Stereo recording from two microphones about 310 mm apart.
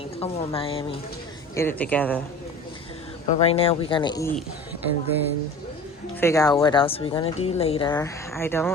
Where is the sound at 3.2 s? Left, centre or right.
Centre.